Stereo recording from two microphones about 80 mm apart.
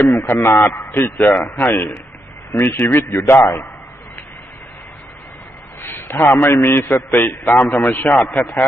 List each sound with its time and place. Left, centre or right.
0.2 s a man's voice: left
5.8 s a man's voice: left
7.2 s a man's voice: centre